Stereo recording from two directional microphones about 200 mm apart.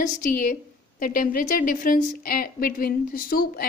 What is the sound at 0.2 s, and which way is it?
A woman's voice, 45° left (ahead or behind).